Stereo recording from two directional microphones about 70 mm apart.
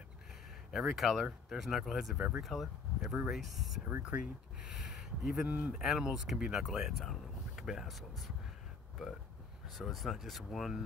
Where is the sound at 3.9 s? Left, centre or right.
Right.